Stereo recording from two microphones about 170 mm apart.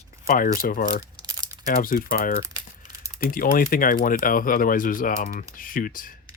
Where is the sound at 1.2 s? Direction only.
20° right (ahead or behind).